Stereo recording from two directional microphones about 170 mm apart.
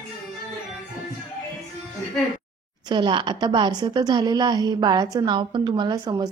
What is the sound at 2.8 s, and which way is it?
A woman's voice, 30° right (ahead or behind).